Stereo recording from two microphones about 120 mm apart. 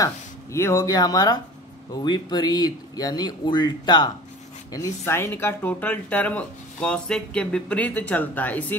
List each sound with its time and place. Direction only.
0.0 s speech: 25° left (ahead or behind)
4.7 s speech: 25° left (ahead or behind)